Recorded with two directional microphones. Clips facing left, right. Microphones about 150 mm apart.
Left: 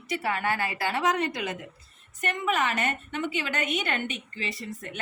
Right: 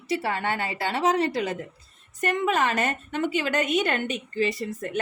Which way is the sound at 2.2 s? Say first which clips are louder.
Right 4 dB; 40° right (ahead or behind).